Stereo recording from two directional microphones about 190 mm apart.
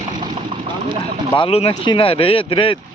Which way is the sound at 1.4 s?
30° left (ahead or behind).